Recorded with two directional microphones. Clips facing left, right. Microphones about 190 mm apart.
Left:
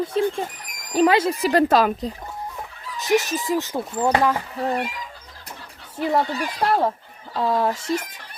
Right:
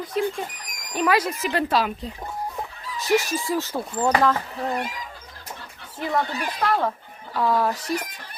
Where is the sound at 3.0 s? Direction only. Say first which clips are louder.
Left 1 dB; 20° left (ahead or behind).